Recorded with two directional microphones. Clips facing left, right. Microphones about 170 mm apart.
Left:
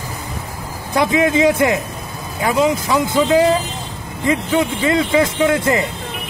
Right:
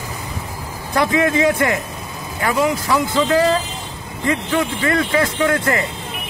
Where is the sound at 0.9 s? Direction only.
15° left (ahead or behind).